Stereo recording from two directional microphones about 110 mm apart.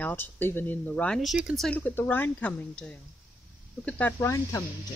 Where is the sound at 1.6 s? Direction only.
10° left (ahead or behind).